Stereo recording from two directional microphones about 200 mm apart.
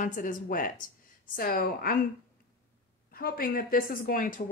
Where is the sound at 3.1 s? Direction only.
50° left (ahead or behind).